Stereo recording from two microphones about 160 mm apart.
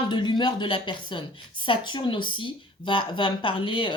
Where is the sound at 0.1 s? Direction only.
30° left (ahead or behind).